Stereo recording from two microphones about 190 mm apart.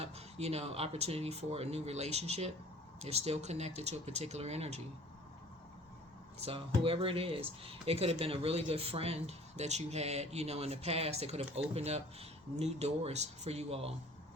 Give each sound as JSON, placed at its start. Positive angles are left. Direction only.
{"t": 0.0, "sound": "speech", "side_deg": -35}
{"t": 6.4, "sound": "speech", "side_deg": -30}